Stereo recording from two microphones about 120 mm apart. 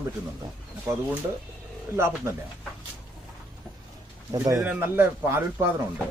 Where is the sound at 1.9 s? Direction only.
20° right (ahead or behind).